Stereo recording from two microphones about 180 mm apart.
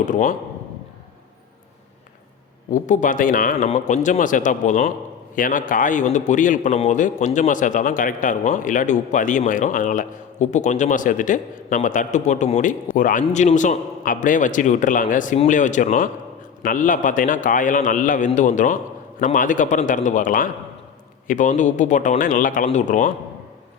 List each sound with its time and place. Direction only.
0.0 s a man's voice: 45° left (ahead or behind)
2.6 s a man's voice: 45° left (ahead or behind)